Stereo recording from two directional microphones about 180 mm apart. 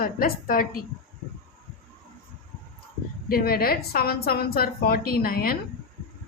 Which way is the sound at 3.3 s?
55° left (ahead or behind).